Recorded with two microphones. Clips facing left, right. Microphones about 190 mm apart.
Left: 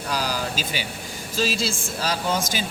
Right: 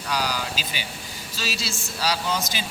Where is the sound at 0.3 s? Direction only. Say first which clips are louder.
Left 3 dB; 45° left (ahead or behind).